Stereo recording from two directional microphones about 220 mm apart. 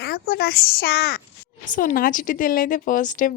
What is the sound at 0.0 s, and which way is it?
Speech, 45° left (ahead or behind).